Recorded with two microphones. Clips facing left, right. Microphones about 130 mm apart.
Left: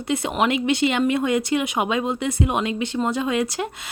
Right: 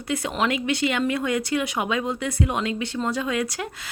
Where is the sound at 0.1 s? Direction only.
20° left (ahead or behind).